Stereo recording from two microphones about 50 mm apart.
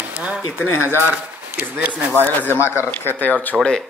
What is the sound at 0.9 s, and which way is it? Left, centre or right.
Speech, right.